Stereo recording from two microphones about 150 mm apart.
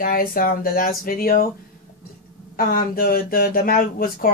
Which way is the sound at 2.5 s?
75° left (ahead or behind).